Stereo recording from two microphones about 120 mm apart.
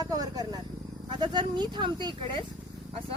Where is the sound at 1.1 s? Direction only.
40° right (ahead or behind).